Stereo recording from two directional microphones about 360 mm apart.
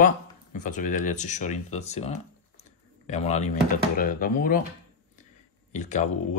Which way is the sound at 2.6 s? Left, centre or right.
Centre.